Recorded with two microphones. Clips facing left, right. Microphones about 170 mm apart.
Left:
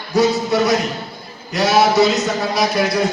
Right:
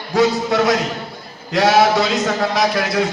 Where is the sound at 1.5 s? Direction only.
90° right.